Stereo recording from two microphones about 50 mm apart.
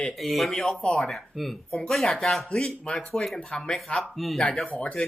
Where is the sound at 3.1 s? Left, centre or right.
Centre.